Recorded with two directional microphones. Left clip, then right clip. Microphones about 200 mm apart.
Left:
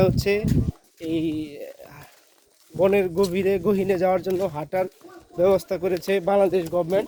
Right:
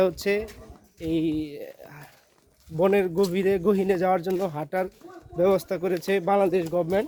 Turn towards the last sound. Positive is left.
turn(degrees=-15)  # may be behind; listen again after turning